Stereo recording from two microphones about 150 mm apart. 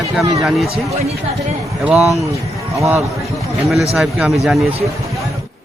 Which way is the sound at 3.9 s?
5° right (ahead or behind).